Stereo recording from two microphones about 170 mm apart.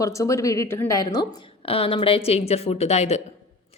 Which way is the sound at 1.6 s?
35° left (ahead or behind).